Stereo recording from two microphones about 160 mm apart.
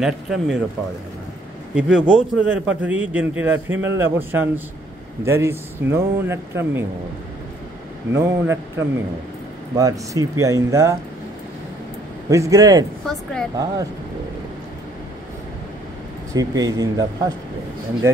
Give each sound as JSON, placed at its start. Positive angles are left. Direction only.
{"t": 0.0, "sound": "speech", "side_deg": 0}
{"t": 1.8, "sound": "a man's voice", "side_deg": -5}
{"t": 8.1, "sound": "a man's voice", "side_deg": -15}
{"t": 12.3, "sound": "speech", "side_deg": -20}
{"t": 13.0, "sound": "speech", "side_deg": 5}
{"t": 16.3, "sound": "speech", "side_deg": -25}